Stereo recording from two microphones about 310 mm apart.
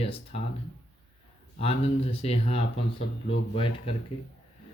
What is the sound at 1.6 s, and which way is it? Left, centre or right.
Speech, centre.